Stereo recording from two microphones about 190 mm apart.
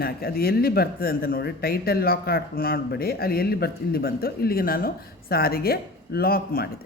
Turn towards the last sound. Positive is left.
turn(degrees=55)  # may be behind; listen again after turning